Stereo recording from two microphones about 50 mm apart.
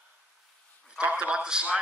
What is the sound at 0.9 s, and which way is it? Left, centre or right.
Speech, right.